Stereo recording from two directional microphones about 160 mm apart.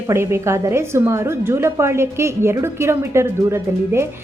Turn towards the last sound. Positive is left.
turn(degrees=-15)  # may be behind; listen again after turning